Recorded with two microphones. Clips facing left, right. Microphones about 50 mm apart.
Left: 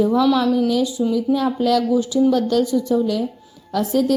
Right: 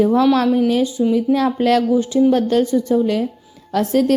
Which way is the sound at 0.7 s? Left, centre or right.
Right.